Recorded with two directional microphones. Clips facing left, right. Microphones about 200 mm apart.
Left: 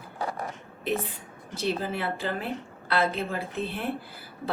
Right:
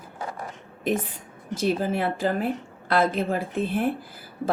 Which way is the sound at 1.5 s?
45° right (ahead or behind).